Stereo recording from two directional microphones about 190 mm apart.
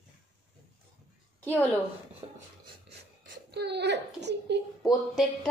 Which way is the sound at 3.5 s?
60° right (ahead or behind).